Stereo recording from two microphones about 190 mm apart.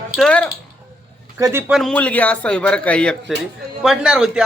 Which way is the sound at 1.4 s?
15° right (ahead or behind).